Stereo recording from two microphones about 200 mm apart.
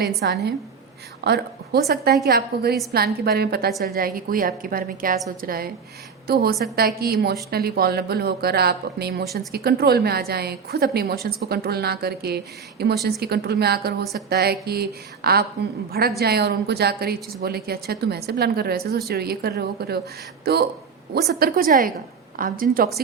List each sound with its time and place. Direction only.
0.0 s a woman's voice: 55° right (ahead or behind)